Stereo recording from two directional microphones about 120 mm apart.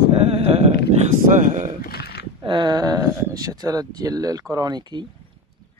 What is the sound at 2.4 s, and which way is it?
Speech, 40° right (ahead or behind).